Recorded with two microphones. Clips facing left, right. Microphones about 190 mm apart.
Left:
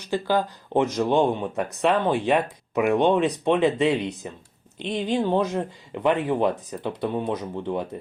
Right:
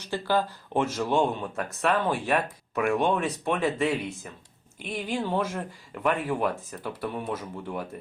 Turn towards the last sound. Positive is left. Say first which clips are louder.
# left 6 dB
turn(degrees=20)  # may be behind; listen again after turning